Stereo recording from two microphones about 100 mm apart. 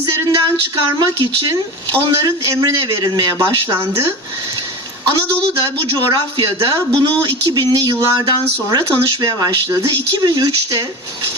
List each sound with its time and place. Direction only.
0.0 s a woman's voice: 40° right (ahead or behind)
5.0 s a woman's voice: 45° right (ahead or behind)